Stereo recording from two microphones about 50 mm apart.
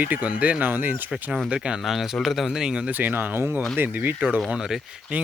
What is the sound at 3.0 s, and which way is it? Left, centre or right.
Speech, right.